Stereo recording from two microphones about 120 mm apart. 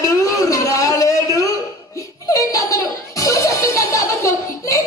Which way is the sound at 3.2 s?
25° left (ahead or behind).